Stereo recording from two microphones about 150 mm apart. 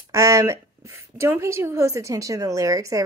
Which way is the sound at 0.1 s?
20° right (ahead or behind).